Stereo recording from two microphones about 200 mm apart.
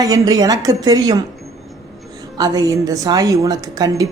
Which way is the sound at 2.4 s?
15° right (ahead or behind).